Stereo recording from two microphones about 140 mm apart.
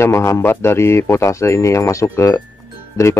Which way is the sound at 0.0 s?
20° left (ahead or behind).